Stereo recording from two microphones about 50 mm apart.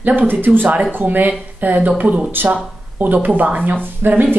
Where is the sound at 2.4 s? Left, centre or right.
Right.